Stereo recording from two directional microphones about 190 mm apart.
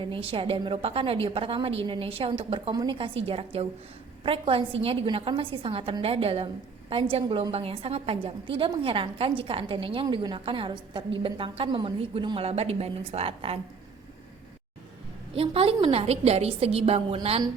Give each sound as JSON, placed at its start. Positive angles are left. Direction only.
{"t": 0.0, "sound": "a woman's voice", "side_deg": -30}
{"t": 15.4, "sound": "a woman's voice", "side_deg": -30}